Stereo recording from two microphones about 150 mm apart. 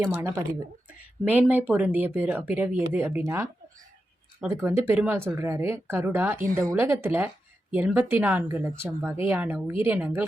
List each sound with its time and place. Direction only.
0.0 s speech: 15° right (ahead or behind)